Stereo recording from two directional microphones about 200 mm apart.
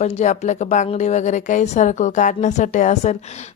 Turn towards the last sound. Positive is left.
turn(degrees=35)  # may be behind; listen again after turning